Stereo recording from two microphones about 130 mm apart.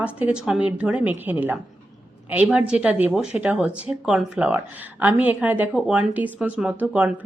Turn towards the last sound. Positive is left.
turn(degrees=-10)  # may be behind; listen again after turning